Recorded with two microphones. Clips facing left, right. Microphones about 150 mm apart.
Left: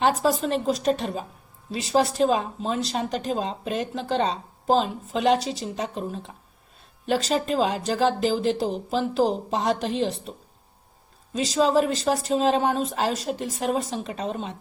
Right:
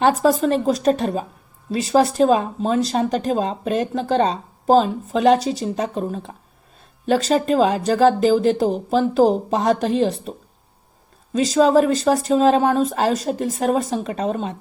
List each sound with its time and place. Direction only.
0.0 s speech: 45° right (ahead or behind)
11.3 s speech: 45° right (ahead or behind)